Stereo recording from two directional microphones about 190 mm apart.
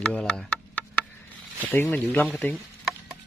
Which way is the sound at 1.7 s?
10° left (ahead or behind).